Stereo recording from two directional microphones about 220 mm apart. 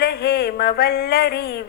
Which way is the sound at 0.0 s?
45° left (ahead or behind).